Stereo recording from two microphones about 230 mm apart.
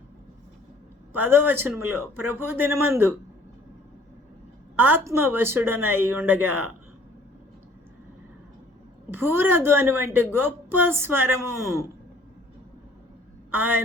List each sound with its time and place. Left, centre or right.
1.2 s a woman's voice: centre
4.8 s a woman's voice: centre
6.4 s speech: right
9.0 s a woman's voice: centre